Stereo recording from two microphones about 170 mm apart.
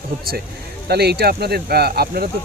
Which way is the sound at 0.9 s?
70° right (ahead or behind).